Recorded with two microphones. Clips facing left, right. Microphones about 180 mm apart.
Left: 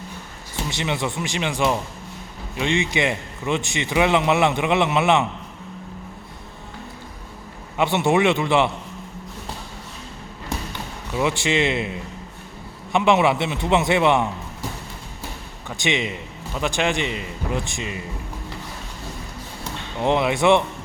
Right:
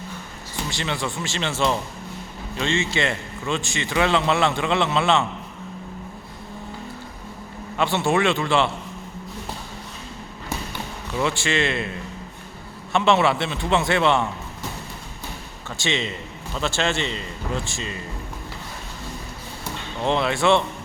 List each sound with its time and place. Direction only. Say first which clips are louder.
0.7 s a man's voice: left 3 dB; 20° left (ahead or behind)
7.8 s a man's voice: left 2 dB; 20° left (ahead or behind)
11.1 s a man's voice: left 2 dB; 15° left (ahead or behind)
15.7 s a man's voice: left 2 dB; 15° left (ahead or behind)
20.0 s a man's voice: left 2 dB; 15° left (ahead or behind)